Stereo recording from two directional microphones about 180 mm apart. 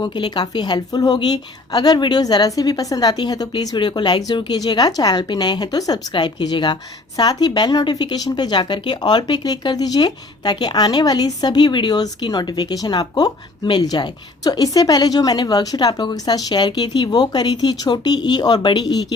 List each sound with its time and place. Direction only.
0.0 s speech: 25° left (ahead or behind)